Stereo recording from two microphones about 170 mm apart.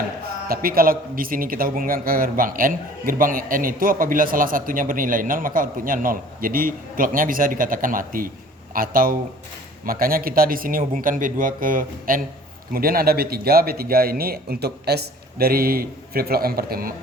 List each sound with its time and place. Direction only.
0.4 s a man's voice: 60° right (ahead or behind)